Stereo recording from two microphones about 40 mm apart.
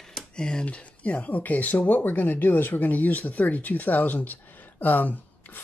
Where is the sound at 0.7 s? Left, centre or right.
Left.